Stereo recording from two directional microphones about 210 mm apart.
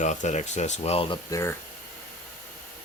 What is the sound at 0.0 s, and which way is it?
Speech, 35° left (ahead or behind).